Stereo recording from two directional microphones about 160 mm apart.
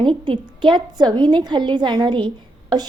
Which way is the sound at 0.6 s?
30° right (ahead or behind).